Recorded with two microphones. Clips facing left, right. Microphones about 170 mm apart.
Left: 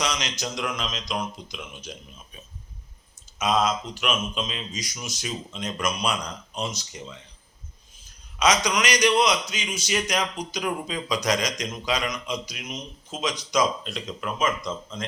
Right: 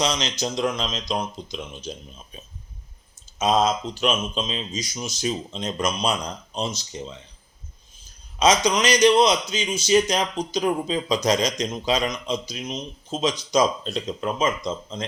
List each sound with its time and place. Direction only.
0.0 s a man's voice: 25° right (ahead or behind)
8.4 s a man's voice: 25° right (ahead or behind)